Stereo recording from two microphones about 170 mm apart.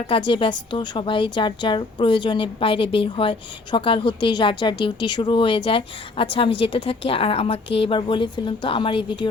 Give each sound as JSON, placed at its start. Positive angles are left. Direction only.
{"t": 0.1, "sound": "a woman's voice", "side_deg": 30}